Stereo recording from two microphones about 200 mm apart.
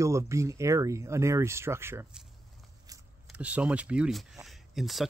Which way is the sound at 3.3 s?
5° right (ahead or behind).